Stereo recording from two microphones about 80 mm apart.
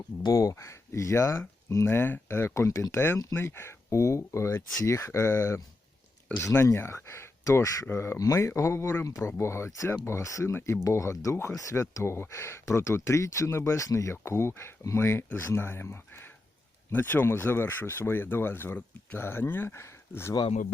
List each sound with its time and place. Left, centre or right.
0.3 s speech: left
2.6 s speech: left